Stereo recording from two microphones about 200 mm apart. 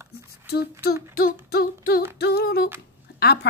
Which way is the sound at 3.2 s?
55° left (ahead or behind).